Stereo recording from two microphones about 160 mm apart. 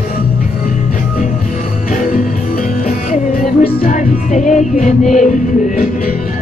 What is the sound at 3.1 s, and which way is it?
Music, 55° left (ahead or behind).